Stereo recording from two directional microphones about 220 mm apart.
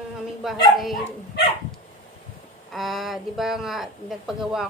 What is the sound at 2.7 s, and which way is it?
A woman's voice, centre (ahead or behind).